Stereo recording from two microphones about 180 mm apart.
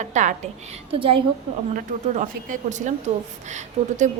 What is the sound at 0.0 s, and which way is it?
Speech, 40° right (ahead or behind).